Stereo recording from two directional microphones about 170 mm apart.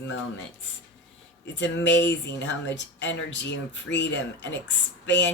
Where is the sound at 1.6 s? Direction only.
90° left.